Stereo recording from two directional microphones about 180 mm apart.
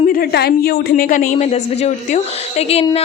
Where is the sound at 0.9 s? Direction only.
45° left (ahead or behind).